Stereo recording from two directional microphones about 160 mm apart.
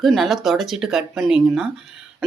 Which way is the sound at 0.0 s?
Centre (ahead or behind).